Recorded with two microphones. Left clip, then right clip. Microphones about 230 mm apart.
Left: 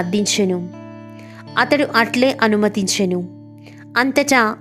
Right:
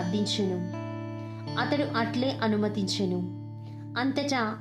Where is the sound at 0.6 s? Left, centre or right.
Centre.